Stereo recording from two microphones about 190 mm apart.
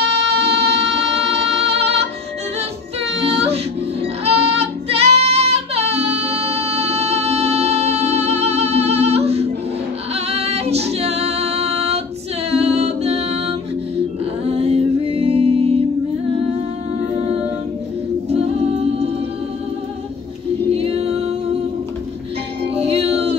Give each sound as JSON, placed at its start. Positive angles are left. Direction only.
{"t": 0.0, "sound": "music", "side_deg": -60}
{"t": 1.1, "sound": "music", "side_deg": -30}
{"t": 3.0, "sound": "child singing", "side_deg": -30}
{"t": 10.1, "sound": "female singing", "side_deg": -35}
{"t": 12.4, "sound": "music", "side_deg": -35}
{"t": 17.1, "sound": "humming", "side_deg": -30}
{"t": 18.3, "sound": "music", "side_deg": -30}
{"t": 20.7, "sound": "a capella", "side_deg": -30}
{"t": 22.8, "sound": "music", "side_deg": -35}